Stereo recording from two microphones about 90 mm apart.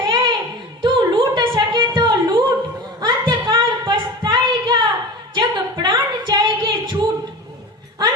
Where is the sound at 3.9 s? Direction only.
60° right (ahead or behind).